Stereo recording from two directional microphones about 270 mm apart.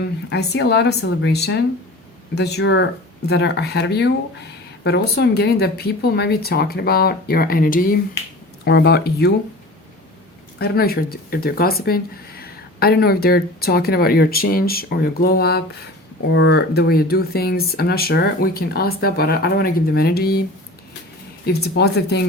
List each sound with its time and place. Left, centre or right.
0.3 s speech: left
10.6 s speech: left
21.4 s speech: left